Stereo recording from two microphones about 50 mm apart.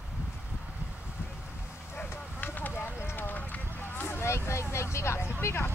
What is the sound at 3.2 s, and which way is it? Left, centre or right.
Clip-clop, left.